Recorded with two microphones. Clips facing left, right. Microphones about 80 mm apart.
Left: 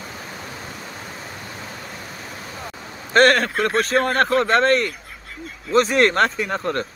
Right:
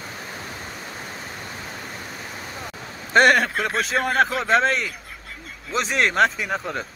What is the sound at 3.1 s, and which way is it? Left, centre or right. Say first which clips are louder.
Speech: left 1 dB; centre.